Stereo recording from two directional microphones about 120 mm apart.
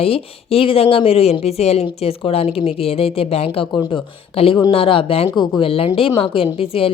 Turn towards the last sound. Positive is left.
turn(degrees=50)  # may be behind; listen again after turning